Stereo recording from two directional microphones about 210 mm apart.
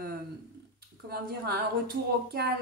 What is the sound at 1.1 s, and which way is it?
A woman's voice, 45° right (ahead or behind).